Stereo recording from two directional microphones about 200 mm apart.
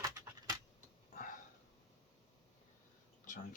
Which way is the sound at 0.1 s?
20° right (ahead or behind).